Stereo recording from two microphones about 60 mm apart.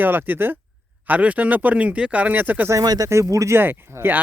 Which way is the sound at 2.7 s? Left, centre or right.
Right.